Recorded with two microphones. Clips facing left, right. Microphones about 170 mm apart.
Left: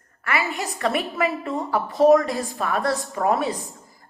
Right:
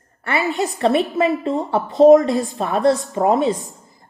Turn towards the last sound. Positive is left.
turn(degrees=-20)  # may be behind; listen again after turning